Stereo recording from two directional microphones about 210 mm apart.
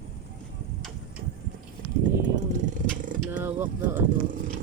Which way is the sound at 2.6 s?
35° right (ahead or behind).